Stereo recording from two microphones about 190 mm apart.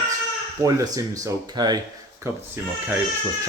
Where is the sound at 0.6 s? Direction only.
20° right (ahead or behind).